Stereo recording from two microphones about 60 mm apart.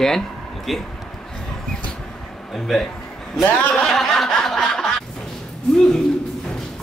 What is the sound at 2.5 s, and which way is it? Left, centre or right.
A man's voice, centre.